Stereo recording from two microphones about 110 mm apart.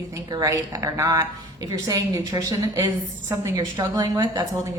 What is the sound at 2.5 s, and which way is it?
Speech, 25° right (ahead or behind).